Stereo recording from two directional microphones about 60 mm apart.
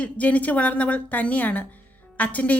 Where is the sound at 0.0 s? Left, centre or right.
Left.